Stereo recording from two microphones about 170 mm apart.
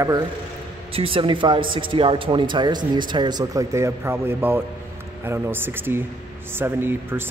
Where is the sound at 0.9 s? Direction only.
30° right (ahead or behind).